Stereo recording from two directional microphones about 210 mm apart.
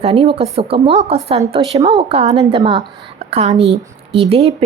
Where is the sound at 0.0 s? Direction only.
30° right (ahead or behind).